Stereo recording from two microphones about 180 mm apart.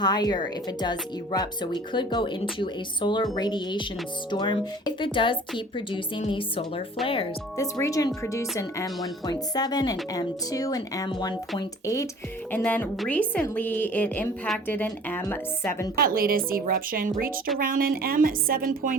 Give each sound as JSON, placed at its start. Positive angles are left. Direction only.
{"t": 0.0, "sound": "speech", "side_deg": 20}
{"t": 7.5, "sound": "a woman's voice", "side_deg": 15}
{"t": 12.5, "sound": "a woman's voice", "side_deg": 10}
{"t": 16.0, "sound": "speech", "side_deg": -55}